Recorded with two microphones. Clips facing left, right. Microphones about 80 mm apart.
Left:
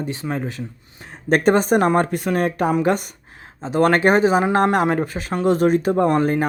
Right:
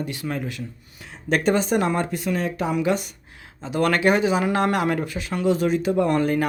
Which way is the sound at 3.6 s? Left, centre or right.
Left.